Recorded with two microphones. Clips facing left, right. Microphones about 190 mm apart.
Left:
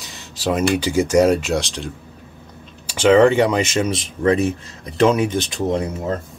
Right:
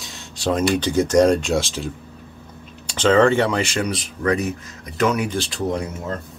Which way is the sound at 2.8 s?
10° left (ahead or behind).